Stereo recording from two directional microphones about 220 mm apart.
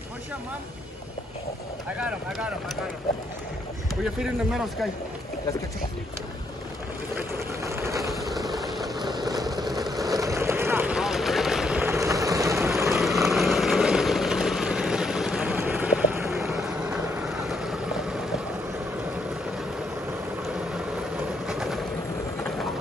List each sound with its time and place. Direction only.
2.0 s speech: 5° right (ahead or behind)
3.9 s speech: centre (ahead or behind)
7.2 s vehicle: 10° right (ahead or behind)
8.5 s a sound: centre (ahead or behind)
8.8 s vehicle: 20° right (ahead or behind)
9.8 s vehicle: centre (ahead or behind)
10.1 s vehicle: 15° right (ahead or behind)
12.9 s vehicle: centre (ahead or behind)
21.5 s vehicle: centre (ahead or behind)